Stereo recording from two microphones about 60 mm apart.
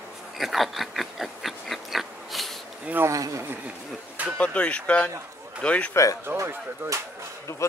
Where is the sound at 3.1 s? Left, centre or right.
Right.